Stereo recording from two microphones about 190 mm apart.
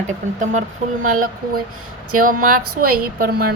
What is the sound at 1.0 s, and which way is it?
A woman's voice, 45° right (ahead or behind).